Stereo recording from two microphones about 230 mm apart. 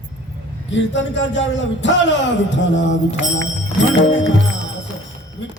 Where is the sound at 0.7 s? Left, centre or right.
Left.